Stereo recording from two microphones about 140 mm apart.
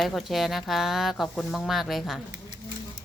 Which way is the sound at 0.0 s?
Centre (ahead or behind).